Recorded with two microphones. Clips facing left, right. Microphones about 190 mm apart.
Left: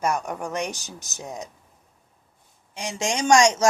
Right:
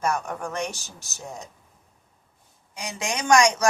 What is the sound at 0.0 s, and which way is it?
Speech, 15° left (ahead or behind).